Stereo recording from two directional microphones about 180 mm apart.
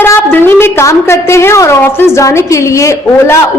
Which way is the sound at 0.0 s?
15° left (ahead or behind).